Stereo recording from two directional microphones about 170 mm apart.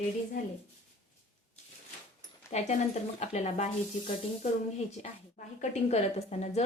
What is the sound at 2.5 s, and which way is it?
A woman's voice, 40° left (ahead or behind).